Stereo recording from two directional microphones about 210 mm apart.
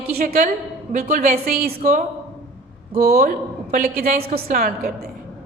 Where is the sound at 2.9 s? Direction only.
45° right (ahead or behind).